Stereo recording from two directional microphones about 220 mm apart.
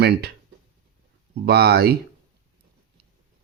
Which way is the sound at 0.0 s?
45° right (ahead or behind).